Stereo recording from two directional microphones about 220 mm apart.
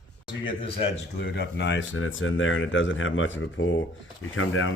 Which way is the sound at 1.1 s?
50° left (ahead or behind).